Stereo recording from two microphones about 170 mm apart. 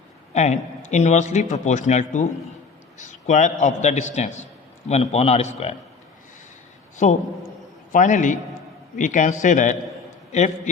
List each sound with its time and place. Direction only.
0.3 s a man's voice: 40° left (ahead or behind)
6.9 s a man's voice: 45° left (ahead or behind)